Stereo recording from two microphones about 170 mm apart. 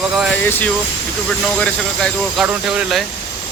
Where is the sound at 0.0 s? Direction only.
5° right (ahead or behind).